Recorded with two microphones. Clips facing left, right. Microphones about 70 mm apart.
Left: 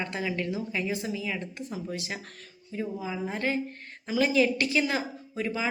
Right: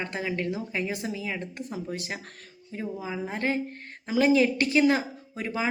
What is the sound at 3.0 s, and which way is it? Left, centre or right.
Speech, right.